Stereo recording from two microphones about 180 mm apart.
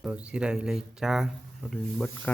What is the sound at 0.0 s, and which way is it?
Speech, 5° right (ahead or behind).